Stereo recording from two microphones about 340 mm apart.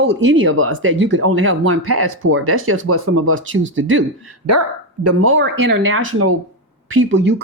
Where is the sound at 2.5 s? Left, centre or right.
Right.